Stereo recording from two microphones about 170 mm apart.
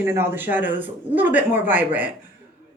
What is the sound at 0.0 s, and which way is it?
Speech, 15° right (ahead or behind).